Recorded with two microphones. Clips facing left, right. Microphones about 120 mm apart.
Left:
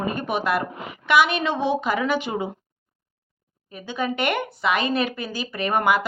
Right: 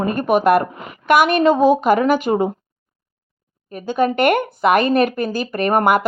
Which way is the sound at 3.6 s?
50° right (ahead or behind).